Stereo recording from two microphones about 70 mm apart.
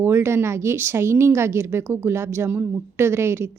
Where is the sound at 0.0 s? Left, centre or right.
Right.